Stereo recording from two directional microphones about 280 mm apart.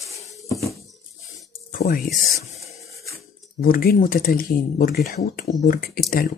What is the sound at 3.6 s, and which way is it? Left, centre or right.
Speech, left.